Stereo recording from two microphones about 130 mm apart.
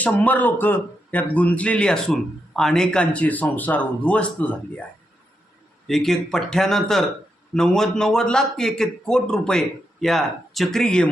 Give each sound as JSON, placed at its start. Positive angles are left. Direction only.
{"t": 0.0, "sound": "speech", "side_deg": 10}
{"t": 5.9, "sound": "a man's voice", "side_deg": 5}